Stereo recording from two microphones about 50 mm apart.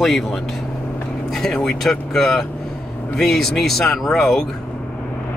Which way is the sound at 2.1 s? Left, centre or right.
Centre.